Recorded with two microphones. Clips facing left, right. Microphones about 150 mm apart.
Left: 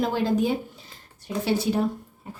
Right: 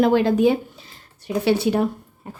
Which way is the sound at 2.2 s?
55° right (ahead or behind).